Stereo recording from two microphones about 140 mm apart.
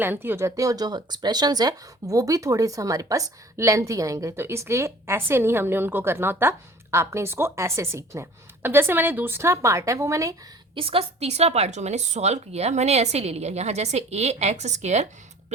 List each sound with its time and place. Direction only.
0.0 s speech: 15° right (ahead or behind)
10.8 s a woman's voice: 40° right (ahead or behind)